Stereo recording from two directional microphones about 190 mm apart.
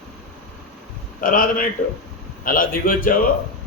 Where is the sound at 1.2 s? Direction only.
45° left (ahead or behind).